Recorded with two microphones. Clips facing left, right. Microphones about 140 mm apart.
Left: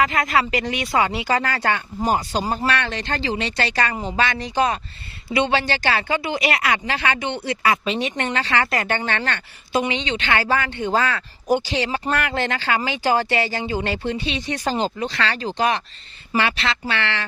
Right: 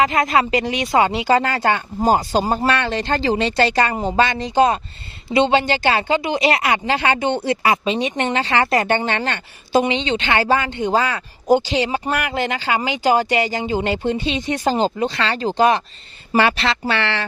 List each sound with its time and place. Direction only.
0.0 s a woman's voice: 20° right (ahead or behind)
14.8 s speech: 40° right (ahead or behind)
15.0 s speech: 25° right (ahead or behind)